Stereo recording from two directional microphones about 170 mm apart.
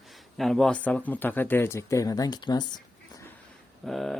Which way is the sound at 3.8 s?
Centre (ahead or behind).